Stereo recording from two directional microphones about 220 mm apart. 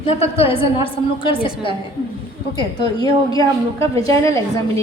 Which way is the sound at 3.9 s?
25° right (ahead or behind).